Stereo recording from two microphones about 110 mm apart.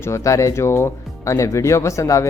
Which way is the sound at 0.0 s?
30° left (ahead or behind).